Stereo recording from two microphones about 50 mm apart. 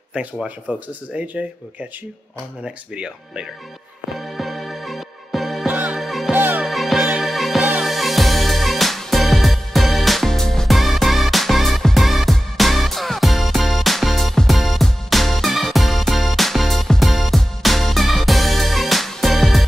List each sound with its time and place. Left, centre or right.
0.7 s speech: right
2.6 s speech: centre
4.1 s music: centre
5.7 s music: right
5.9 s music: centre
6.3 s music: right
6.7 s music: centre